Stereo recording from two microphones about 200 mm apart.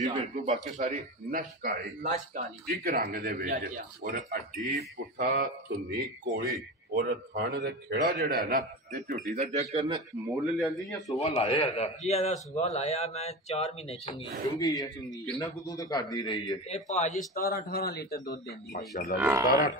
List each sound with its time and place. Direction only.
0.0 s a man's voice: 35° right (ahead or behind)
9.3 s a man's voice: 30° right (ahead or behind)
10.5 s speech: centre (ahead or behind)
11.1 s speech: 30° left (ahead or behind)
14.8 s speech: centre (ahead or behind)
15.4 s speech: 20° left (ahead or behind)
16.6 s speech: 35° left (ahead or behind)
17.6 s speech: 50° left (ahead or behind)
19.1 s speech: 10° right (ahead or behind)
19.4 s speech: 45° left (ahead or behind)